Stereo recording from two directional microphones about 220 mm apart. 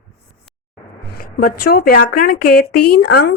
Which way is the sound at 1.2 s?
40° left (ahead or behind).